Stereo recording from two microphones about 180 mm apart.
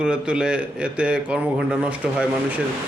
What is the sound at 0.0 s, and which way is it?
A man's voice, 5° right (ahead or behind).